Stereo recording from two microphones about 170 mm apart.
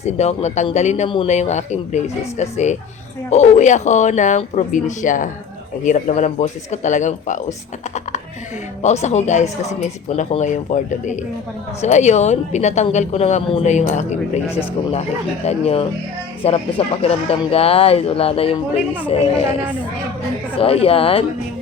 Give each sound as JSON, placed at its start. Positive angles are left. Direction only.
{"t": 0.0, "sound": "a woman's voice", "side_deg": 40}
{"t": 8.8, "sound": "a woman's voice", "side_deg": 40}
{"t": 15.4, "sound": "a woman's voice", "side_deg": 35}
{"t": 20.6, "sound": "a woman's voice", "side_deg": 35}